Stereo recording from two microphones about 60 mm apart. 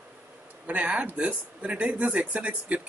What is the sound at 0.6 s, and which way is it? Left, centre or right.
Speech, right.